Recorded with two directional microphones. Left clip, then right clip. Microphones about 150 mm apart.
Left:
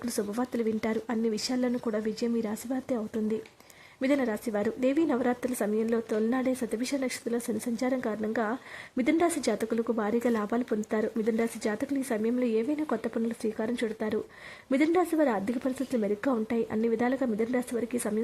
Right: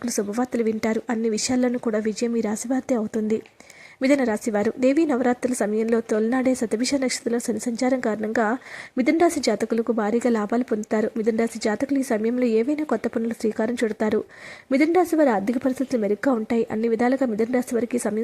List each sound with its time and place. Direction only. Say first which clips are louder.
0.0 s a woman's voice: right 6 dB; 25° right (ahead or behind)